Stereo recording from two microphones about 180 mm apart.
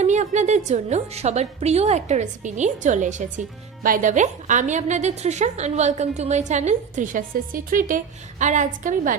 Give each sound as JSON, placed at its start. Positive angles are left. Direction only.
{"t": 0.0, "sound": "a woman's voice", "side_deg": -40}